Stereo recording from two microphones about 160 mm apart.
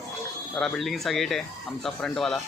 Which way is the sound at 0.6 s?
Centre (ahead or behind).